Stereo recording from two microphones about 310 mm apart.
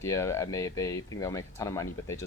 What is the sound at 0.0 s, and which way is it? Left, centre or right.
Speech, centre.